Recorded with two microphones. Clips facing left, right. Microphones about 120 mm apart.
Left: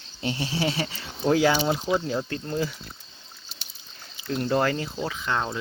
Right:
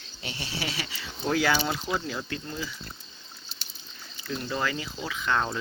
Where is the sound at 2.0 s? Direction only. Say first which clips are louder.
Left 5 dB; 35° left (ahead or behind).